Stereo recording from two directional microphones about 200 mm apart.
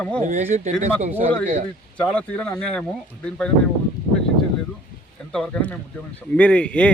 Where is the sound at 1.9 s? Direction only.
5° left (ahead or behind).